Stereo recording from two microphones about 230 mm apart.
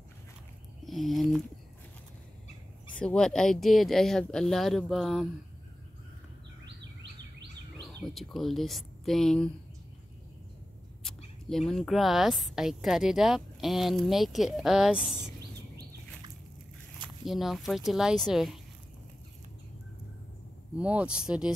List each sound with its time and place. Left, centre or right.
0.8 s a sound: centre
3.0 s speech: centre
6.6 s bird vocalization: right
7.8 s speech: centre
11.4 s speech: centre
17.3 s speech: centre
20.7 s speech: centre